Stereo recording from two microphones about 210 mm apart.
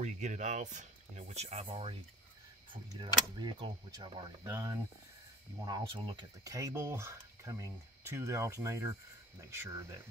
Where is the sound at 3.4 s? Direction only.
20° right (ahead or behind).